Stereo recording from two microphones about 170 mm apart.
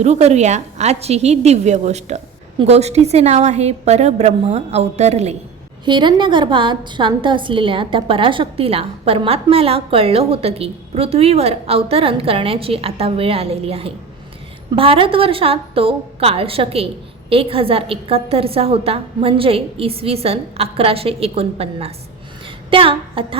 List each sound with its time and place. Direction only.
0.0 s a woman's voice: 40° right (ahead or behind)
5.8 s a woman's voice: 25° right (ahead or behind)